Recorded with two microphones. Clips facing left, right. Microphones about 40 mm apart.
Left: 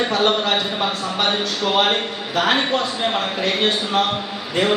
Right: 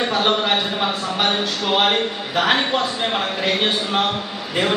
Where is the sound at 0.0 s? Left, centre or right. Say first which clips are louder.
Left 1 dB; centre.